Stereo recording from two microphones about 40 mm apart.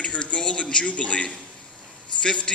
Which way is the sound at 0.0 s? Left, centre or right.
Left.